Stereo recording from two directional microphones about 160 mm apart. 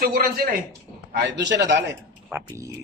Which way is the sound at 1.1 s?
90° right.